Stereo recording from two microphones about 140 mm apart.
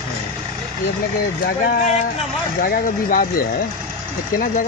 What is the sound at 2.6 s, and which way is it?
Speech, 90° left.